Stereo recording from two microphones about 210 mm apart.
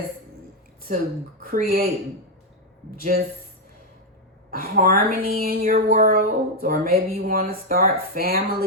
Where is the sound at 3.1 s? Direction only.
40° right (ahead or behind).